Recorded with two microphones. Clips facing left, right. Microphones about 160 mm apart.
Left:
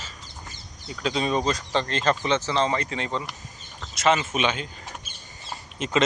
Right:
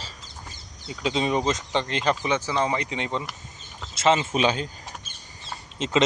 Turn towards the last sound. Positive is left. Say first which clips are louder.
# right 1 dB
turn(degrees=-20)  # may be behind; listen again after turning